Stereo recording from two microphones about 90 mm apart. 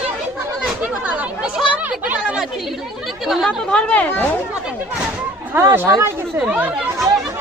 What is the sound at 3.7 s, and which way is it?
Speech, 10° left (ahead or behind).